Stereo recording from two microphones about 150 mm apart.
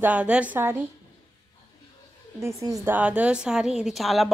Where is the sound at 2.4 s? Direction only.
20° right (ahead or behind); by 4.3 s centre (ahead or behind).